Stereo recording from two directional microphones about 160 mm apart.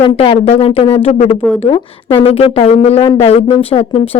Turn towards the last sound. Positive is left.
turn(degrees=35)  # may be behind; listen again after turning